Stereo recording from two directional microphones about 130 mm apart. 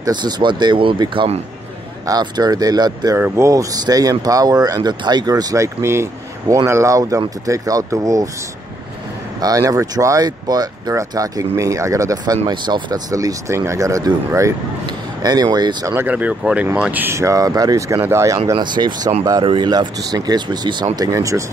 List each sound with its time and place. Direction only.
0.0 s speech: 35° right (ahead or behind)
2.0 s speech: 30° right (ahead or behind)
9.4 s speech: 25° right (ahead or behind)
15.9 s speech: 15° right (ahead or behind)
18.5 s speech: 35° right (ahead or behind)